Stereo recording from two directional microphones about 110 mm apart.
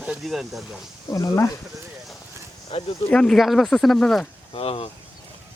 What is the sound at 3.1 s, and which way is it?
Speech, 5° left (ahead or behind).